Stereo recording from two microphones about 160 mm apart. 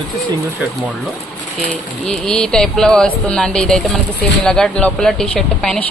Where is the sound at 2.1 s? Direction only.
5° left (ahead or behind).